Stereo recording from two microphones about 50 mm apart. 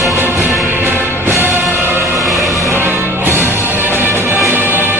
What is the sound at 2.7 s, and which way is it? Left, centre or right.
Music, right.